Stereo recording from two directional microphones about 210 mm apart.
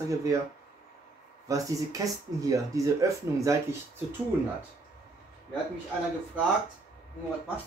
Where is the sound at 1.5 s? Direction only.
15° right (ahead or behind).